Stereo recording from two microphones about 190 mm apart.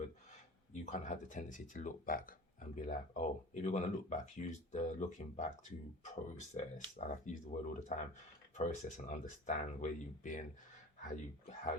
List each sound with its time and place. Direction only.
0.7 s speech: 40° left (ahead or behind)